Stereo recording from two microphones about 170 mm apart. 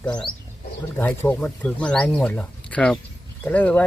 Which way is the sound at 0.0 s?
5° left (ahead or behind).